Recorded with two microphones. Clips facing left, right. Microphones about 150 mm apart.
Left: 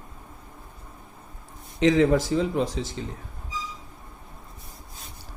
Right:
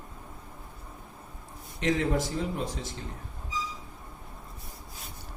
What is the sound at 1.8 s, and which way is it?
Speech, 90° left.